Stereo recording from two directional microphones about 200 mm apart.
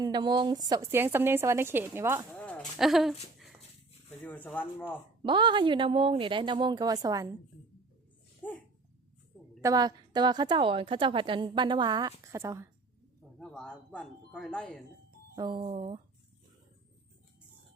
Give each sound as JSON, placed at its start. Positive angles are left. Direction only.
{"t": 0.0, "sound": "speech", "side_deg": -20}
{"t": 2.5, "sound": "a sound", "side_deg": 0}
{"t": 3.3, "sound": "dog", "side_deg": 0}
{"t": 4.1, "sound": "speech", "side_deg": 5}
{"t": 5.2, "sound": "a woman's voice", "side_deg": -25}
{"t": 8.4, "sound": "a sound", "side_deg": 10}
{"t": 9.6, "sound": "a woman's voice", "side_deg": -15}
{"t": 13.4, "sound": "speech", "side_deg": 5}
{"t": 15.4, "sound": "a woman's voice", "side_deg": -25}